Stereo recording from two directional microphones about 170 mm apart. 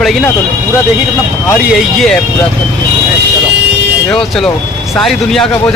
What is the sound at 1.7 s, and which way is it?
Speech, centre (ahead or behind).